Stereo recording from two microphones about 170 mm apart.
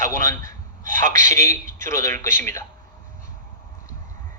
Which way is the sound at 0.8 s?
50° right (ahead or behind).